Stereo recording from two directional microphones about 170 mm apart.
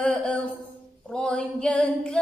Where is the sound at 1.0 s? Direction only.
5° left (ahead or behind).